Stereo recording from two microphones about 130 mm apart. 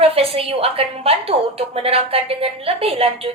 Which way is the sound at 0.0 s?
50° right (ahead or behind).